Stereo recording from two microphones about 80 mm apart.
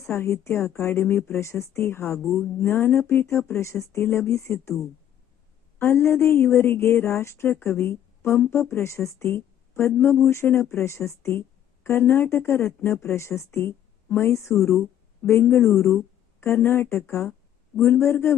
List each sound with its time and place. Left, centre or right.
0.0 s a woman's voice: left
2.1 s speech: centre
2.6 s a woman's voice: left
5.8 s a woman's voice: left
14.5 s speech: centre
15.2 s a woman's voice: left